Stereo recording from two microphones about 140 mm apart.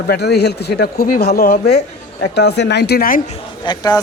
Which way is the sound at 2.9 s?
90° left.